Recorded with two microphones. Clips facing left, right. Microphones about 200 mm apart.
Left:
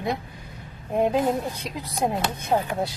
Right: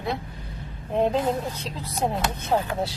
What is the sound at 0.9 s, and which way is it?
Speech, 10° left (ahead or behind).